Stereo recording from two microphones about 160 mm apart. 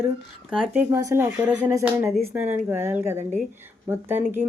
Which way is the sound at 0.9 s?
15° right (ahead or behind).